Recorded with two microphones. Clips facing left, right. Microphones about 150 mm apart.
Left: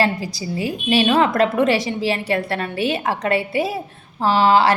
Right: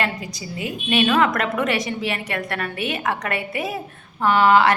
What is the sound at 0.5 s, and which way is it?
A woman's voice, 30° left (ahead or behind).